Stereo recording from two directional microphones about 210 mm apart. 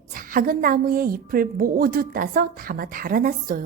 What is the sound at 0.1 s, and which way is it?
A woman's voice, 40° right (ahead or behind).